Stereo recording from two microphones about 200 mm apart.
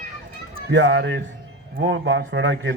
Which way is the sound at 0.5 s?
60° right (ahead or behind).